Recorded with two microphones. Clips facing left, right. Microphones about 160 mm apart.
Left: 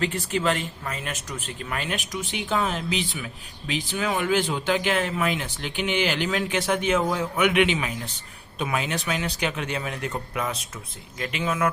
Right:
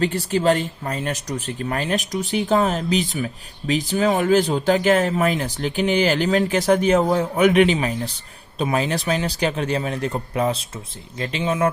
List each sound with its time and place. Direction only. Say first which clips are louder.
0.0 s speech: right 5 dB; 35° right (ahead or behind)